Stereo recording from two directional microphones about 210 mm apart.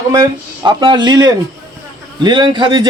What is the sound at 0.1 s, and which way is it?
A man's voice, 20° right (ahead or behind).